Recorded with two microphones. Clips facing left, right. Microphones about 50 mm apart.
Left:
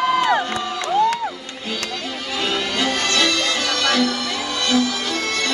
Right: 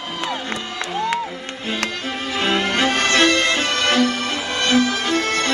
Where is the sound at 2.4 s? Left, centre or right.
Right.